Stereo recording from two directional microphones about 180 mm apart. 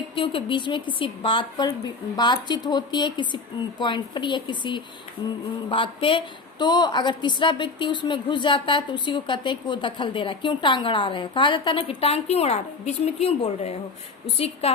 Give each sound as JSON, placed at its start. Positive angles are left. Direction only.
{"t": 0.2, "sound": "a woman's voice", "side_deg": 30}